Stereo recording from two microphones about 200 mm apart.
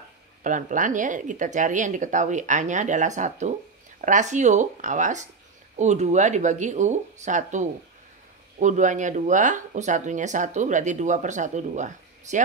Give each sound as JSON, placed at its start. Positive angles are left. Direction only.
{"t": 0.4, "sound": "speech", "side_deg": -40}